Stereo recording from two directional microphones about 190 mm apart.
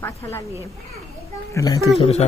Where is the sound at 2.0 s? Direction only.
35° left (ahead or behind).